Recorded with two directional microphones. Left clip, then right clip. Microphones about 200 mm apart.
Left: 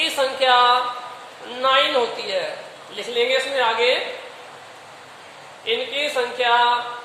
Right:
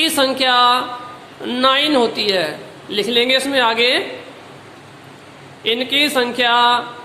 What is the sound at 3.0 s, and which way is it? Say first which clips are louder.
Speech: right 5 dB; 30° right (ahead or behind).